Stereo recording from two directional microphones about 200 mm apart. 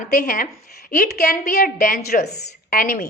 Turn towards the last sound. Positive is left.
turn(degrees=45)  # may be behind; listen again after turning